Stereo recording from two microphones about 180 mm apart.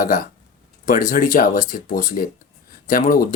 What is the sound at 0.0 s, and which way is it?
Speech, 50° left (ahead or behind).